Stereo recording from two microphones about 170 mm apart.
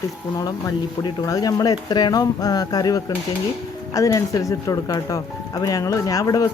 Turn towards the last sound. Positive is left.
turn(degrees=20)  # may be behind; listen again after turning